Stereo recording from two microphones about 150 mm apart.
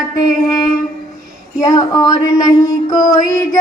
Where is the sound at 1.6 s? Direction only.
25° left (ahead or behind).